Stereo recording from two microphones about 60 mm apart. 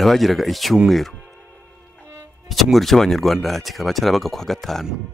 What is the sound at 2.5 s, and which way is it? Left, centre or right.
Speech, centre.